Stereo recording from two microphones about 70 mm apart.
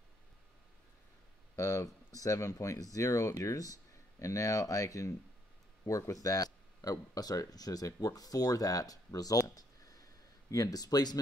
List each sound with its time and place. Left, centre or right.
1.6 s speech: left